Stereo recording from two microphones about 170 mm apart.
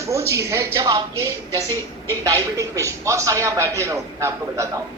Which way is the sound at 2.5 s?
20° right (ahead or behind).